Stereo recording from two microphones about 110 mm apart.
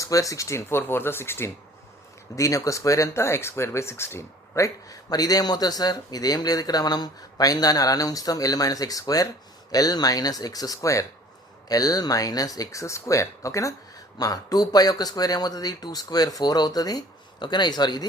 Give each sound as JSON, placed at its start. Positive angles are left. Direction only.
{"t": 0.0, "sound": "speech", "side_deg": 30}